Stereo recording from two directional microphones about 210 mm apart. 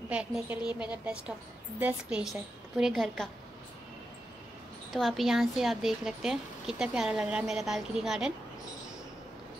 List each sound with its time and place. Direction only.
0.1 s speech: 5° right (ahead or behind)
0.6 s a woman's voice: 20° left (ahead or behind)
0.8 s a woman's voice: 5° right (ahead or behind)
4.9 s speech: centre (ahead or behind)